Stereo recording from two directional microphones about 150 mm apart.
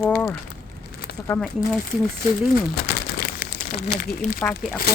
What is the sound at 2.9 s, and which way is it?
Crumpling, 80° left.